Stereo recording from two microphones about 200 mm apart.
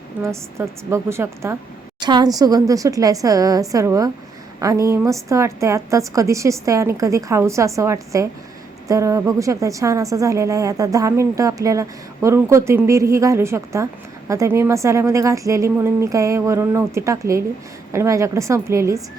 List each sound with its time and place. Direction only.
0.2 s a woman's voice: 15° right (ahead or behind)